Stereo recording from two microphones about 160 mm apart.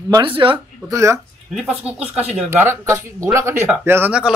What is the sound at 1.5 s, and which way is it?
Speech, 5° right (ahead or behind).